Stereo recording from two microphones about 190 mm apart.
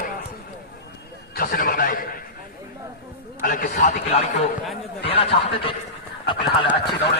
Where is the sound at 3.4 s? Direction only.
45° left (ahead or behind).